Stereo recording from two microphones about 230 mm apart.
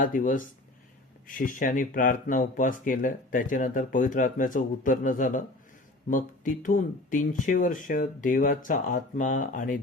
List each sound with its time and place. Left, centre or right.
0.0 s speech: left